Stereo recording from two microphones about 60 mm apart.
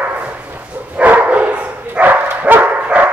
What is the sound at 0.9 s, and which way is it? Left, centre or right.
Dog, right.